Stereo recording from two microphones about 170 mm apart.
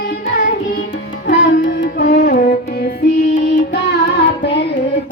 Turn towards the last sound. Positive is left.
turn(degrees=90)